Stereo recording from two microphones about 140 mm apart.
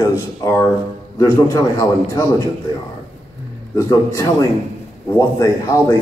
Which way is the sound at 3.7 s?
25° left (ahead or behind).